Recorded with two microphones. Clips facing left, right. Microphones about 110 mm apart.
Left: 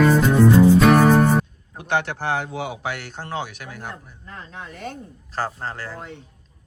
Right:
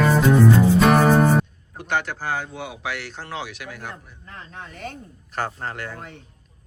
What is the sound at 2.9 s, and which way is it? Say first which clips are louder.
Speech: left 2 dB; 45° left (ahead or behind).